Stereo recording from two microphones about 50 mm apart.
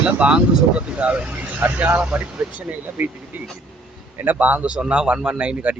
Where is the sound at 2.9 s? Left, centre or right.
Right.